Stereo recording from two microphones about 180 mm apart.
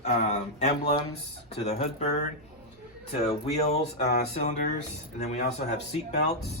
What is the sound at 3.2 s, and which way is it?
Speech, 35° left (ahead or behind).